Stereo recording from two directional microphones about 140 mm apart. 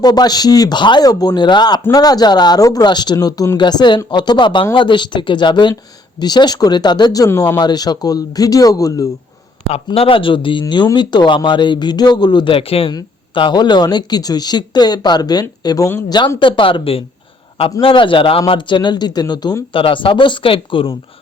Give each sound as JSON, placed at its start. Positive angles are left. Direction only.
{"t": 0.0, "sound": "speech", "side_deg": 30}
{"t": 9.7, "sound": "speech", "side_deg": 45}